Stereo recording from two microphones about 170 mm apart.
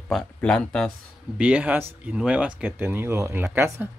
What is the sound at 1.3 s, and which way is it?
Speech, 10° right (ahead or behind).